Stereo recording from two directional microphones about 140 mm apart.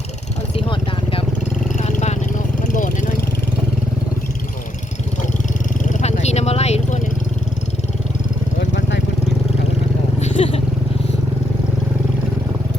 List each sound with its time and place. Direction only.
0.5 s vehicle: 40° left (ahead or behind)
1.8 s vehicle: 55° left (ahead or behind)
2.6 s vehicle: 70° left (ahead or behind)
5.9 s vehicle: 55° left (ahead or behind)
10.2 s vehicle: 50° left (ahead or behind)